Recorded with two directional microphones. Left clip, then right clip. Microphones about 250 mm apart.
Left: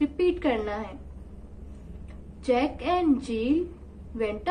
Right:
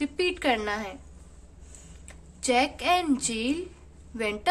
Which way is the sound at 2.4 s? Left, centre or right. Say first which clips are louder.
Right 2 dB; right.